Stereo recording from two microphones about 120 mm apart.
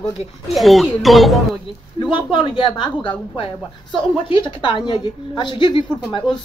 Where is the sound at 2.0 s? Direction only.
40° left (ahead or behind).